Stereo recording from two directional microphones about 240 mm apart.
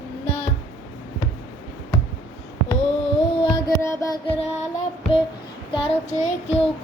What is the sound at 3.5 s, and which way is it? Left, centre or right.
Music, centre.